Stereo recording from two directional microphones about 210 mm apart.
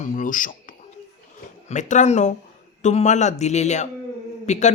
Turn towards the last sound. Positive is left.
turn(degrees=35)  # may be behind; listen again after turning